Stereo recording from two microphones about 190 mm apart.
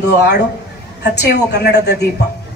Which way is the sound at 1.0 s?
60° left (ahead or behind).